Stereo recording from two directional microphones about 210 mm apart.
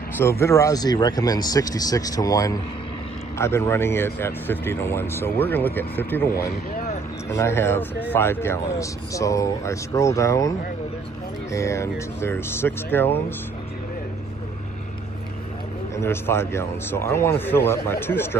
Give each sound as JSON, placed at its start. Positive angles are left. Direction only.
{"t": 0.2, "sound": "speech", "side_deg": 10}
{"t": 7.2, "sound": "speech", "side_deg": 15}
{"t": 11.5, "sound": "speech", "side_deg": 15}
{"t": 16.0, "sound": "speech", "side_deg": 10}